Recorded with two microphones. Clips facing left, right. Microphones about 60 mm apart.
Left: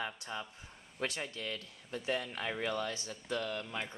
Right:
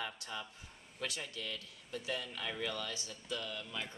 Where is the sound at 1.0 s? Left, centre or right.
Left.